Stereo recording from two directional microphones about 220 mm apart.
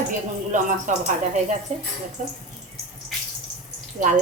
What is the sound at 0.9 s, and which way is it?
A woman's voice, 35° right (ahead or behind).